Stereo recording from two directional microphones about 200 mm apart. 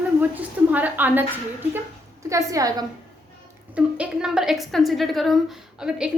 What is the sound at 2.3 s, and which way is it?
Speech, 15° right (ahead or behind).